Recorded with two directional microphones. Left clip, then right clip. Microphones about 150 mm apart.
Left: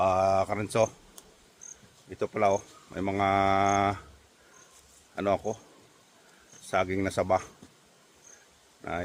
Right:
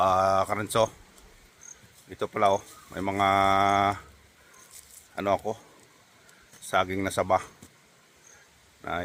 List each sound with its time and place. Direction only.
0.0 s speech: centre (ahead or behind)
2.0 s speech: 5° left (ahead or behind)
5.1 s speech: 10° left (ahead or behind)
6.7 s speech: 10° left (ahead or behind)